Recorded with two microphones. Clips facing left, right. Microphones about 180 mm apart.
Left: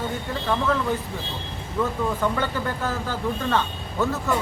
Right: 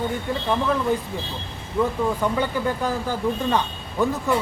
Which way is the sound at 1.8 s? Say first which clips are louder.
Right 2 dB; 15° right (ahead or behind).